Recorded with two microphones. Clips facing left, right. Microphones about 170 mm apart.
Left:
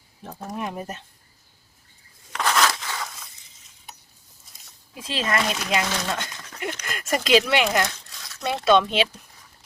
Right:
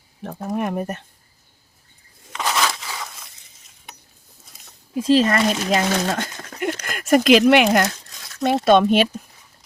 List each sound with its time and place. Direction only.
0.2 s speech: 55° right (ahead or behind)
2.3 s crunch: 5° right (ahead or behind)
5.0 s speech: 40° right (ahead or behind)